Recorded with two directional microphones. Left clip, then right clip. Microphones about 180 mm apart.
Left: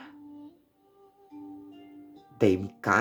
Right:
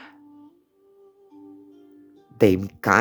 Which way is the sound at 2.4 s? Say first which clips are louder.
Right 6 dB; 45° right (ahead or behind).